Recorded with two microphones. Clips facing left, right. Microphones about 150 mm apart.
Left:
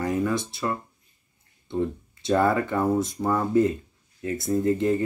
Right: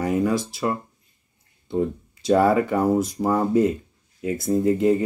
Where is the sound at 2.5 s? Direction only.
15° right (ahead or behind).